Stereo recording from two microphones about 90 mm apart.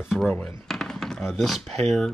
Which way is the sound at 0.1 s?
5° left (ahead or behind).